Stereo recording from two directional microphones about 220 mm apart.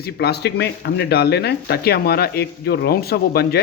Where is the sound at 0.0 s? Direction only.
45° left (ahead or behind).